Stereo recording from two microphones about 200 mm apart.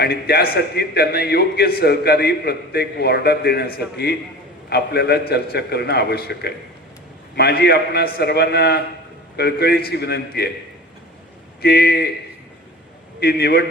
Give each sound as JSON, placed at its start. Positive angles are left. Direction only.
{"t": 0.0, "sound": "a man's voice", "side_deg": 50}
{"t": 11.6, "sound": "a man's voice", "side_deg": 50}
{"t": 13.1, "sound": "a man's voice", "side_deg": 50}